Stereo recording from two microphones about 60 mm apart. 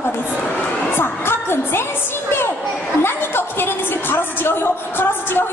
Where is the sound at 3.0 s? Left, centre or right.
Left.